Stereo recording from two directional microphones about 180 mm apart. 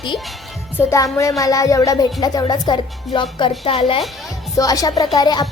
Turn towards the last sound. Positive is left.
turn(degrees=20)  # may be behind; listen again after turning